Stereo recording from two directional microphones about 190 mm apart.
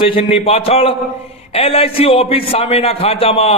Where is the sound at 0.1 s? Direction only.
30° left (ahead or behind).